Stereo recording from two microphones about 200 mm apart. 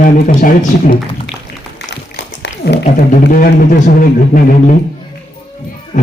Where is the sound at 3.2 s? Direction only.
50° left (ahead or behind).